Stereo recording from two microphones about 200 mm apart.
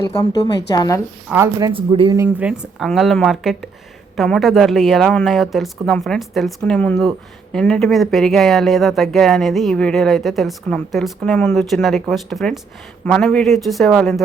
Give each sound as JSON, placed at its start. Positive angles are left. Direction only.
{"t": 0.7, "sound": "a woman's voice", "side_deg": 15}
{"t": 1.3, "sound": "speech", "side_deg": -15}
{"t": 2.1, "sound": "speech", "side_deg": -10}